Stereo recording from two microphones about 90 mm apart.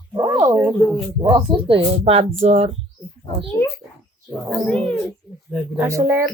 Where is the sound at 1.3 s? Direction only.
75° right (ahead or behind); by 2.2 s 90° right.